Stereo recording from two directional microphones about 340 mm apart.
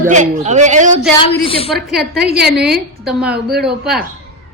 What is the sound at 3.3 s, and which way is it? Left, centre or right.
Speech, right.